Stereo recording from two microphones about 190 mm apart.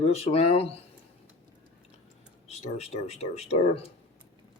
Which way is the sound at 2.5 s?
35° left (ahead or behind).